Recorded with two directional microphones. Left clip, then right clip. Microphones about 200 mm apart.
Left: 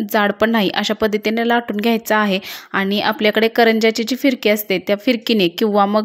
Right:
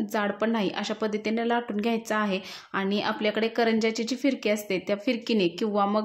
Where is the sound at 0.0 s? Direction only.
35° left (ahead or behind).